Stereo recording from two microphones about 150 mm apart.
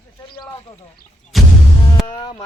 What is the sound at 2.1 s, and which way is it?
Music, 30° left (ahead or behind).